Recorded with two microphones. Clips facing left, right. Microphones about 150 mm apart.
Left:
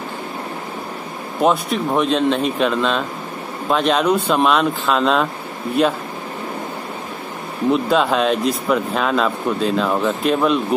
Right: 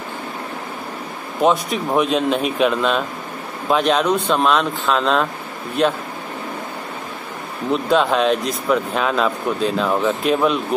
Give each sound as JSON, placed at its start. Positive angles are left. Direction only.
{"t": 1.4, "sound": "speech", "side_deg": 0}
{"t": 7.9, "sound": "speech", "side_deg": 0}